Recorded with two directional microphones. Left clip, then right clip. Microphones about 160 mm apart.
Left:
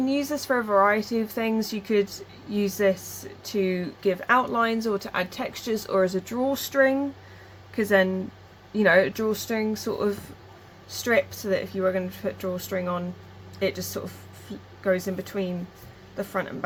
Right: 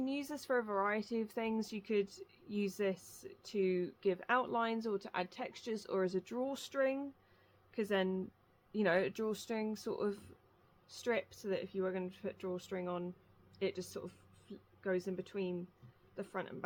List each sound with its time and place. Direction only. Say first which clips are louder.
0.0 s speech: left 15 dB; 75° right (ahead or behind)